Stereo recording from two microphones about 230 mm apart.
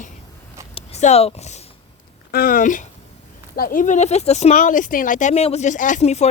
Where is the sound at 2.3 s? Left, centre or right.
Left.